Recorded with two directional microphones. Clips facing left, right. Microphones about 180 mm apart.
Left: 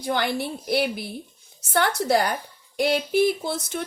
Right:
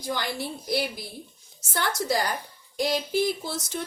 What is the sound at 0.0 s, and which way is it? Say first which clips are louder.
A woman's voice: left 5 dB; 60° left (ahead or behind).